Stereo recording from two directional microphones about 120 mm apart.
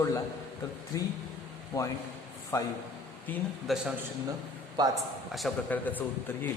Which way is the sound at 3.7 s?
Centre (ahead or behind).